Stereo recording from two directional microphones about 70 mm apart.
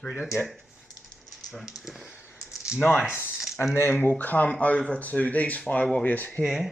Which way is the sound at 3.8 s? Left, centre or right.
Left.